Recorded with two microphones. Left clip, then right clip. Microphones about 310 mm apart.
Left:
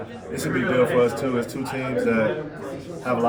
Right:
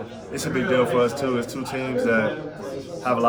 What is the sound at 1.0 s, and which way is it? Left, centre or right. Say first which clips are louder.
A man's voice: left 1 dB; centre.